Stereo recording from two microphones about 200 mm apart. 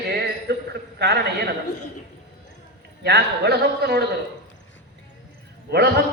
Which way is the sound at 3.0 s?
55° right (ahead or behind).